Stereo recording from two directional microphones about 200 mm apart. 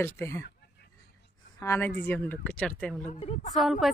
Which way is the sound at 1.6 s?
10° left (ahead or behind).